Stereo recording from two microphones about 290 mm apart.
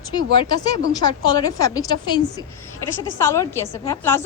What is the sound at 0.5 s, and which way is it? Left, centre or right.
A woman's voice, centre.